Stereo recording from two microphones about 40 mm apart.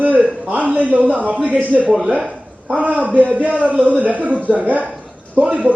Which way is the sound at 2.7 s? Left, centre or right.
Right.